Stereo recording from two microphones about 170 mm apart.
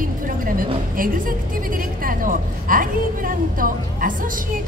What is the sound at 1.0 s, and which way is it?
A woman's voice, 55° right (ahead or behind).